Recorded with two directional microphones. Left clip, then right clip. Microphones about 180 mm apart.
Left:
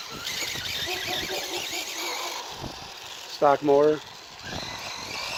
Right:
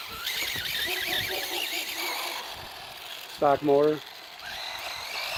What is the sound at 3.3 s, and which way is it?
Speech, 50° right (ahead or behind).